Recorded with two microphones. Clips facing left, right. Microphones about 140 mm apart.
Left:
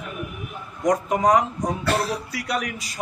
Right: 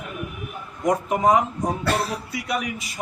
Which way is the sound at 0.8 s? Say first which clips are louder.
Even; 5° right (ahead or behind).